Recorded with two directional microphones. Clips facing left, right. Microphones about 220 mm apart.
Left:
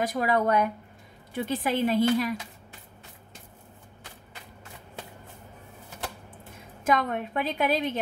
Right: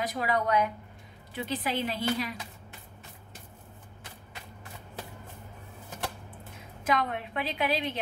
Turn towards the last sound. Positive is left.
turn(degrees=45)  # may be behind; listen again after turning